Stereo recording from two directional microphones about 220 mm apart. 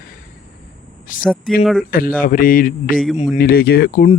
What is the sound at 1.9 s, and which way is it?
Speech, 40° left (ahead or behind).